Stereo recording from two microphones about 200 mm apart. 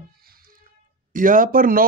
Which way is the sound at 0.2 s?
50° right (ahead or behind).